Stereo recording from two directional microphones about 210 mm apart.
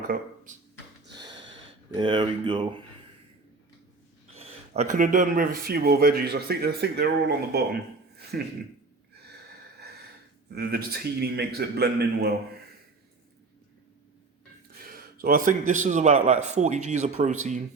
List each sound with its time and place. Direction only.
1.2 s snort: 20° right (ahead or behind)
1.9 s speech: 20° right (ahead or behind)
4.4 s speech: 30° right (ahead or behind); by 8.5 s 45° right (ahead or behind)
10.5 s speech: 45° right (ahead or behind)
14.8 s speech: 45° right (ahead or behind)